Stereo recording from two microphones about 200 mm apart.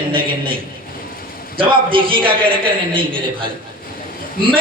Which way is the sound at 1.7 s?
25° right (ahead or behind).